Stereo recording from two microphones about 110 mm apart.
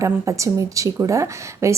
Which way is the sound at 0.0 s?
30° right (ahead or behind).